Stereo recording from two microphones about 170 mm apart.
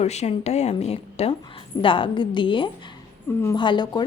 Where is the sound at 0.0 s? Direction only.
40° left (ahead or behind).